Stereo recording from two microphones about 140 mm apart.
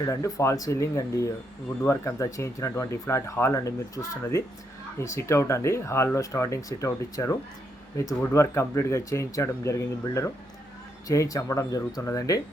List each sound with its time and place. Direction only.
0.0 s speech: 25° left (ahead or behind)